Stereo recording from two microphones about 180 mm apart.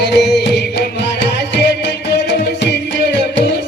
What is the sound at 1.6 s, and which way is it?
Music, 70° left (ahead or behind).